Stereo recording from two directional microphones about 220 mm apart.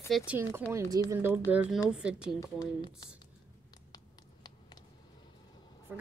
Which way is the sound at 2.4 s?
15° left (ahead or behind).